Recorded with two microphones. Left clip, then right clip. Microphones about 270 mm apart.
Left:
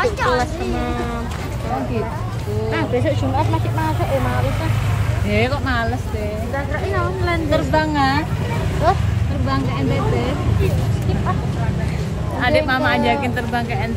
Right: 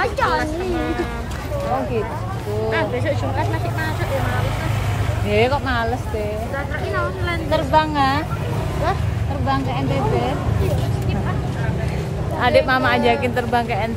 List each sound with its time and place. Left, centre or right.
0.0 s music: right
2.7 s speech: centre
5.3 s speech: centre
7.5 s speech: centre
12.4 s speech: centre